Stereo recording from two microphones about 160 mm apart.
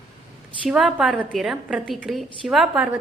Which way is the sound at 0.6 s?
Centre (ahead or behind).